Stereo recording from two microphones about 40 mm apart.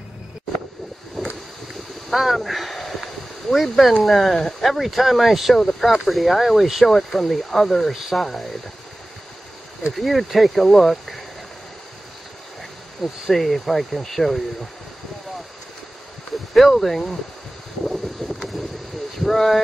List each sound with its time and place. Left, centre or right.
1.2 s boat: centre
1.7 s a sound: centre
4.0 s speech: centre
5.5 s speech: centre
5.9 s speech: centre
7.9 s speech: centre
8.2 s speech: centre
9.9 s speech: centre
13.0 s speech: centre
16.5 s speech: centre
17.8 s wind noise: centre
19.2 s speech: centre